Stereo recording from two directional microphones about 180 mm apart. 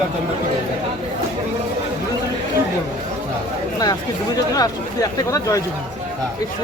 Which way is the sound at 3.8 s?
20° left (ahead or behind).